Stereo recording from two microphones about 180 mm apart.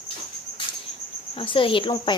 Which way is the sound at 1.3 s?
30° left (ahead or behind).